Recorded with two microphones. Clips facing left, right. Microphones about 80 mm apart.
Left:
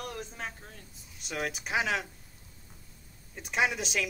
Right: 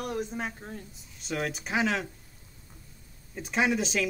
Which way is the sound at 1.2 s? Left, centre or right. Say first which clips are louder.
Right 3 dB; centre.